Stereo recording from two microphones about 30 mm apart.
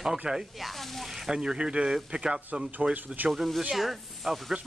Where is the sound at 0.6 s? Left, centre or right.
Centre.